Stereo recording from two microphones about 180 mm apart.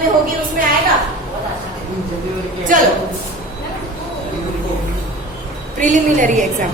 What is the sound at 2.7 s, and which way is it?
Speech, 45° right (ahead or behind).